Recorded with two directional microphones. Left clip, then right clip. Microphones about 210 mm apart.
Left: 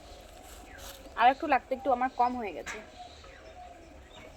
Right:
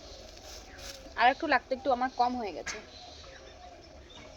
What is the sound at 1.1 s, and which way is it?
Speech, 15° right (ahead or behind).